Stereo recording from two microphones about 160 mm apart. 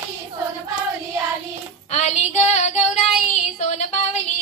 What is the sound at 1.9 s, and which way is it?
Child singing, 45° left (ahead or behind).